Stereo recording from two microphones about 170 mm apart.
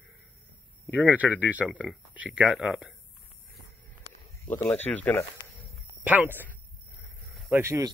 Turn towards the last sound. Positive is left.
turn(degrees=-15)  # may be behind; listen again after turning